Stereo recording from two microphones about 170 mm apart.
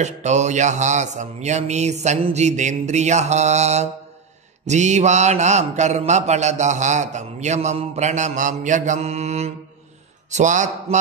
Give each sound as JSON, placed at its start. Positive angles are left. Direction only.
{"t": 0.0, "sound": "mantra", "side_deg": -45}